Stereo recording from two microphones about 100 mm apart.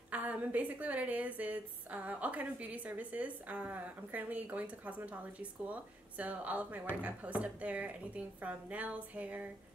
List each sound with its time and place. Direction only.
0.1 s a woman's voice: 15° right (ahead or behind)